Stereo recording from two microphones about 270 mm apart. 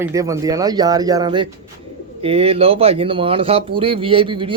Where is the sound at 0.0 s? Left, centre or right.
Centre.